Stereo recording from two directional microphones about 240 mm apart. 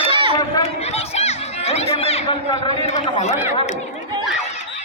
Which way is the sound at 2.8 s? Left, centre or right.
Left.